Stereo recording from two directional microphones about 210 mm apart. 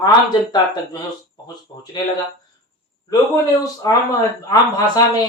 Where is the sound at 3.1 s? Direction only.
20° left (ahead or behind).